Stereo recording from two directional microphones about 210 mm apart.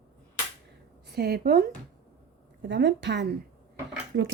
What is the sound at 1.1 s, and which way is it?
Speech, 50° right (ahead or behind).